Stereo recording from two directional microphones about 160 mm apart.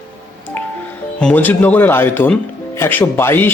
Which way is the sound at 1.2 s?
10° left (ahead or behind).